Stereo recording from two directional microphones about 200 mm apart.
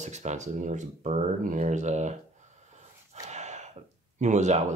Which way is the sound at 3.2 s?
35° right (ahead or behind).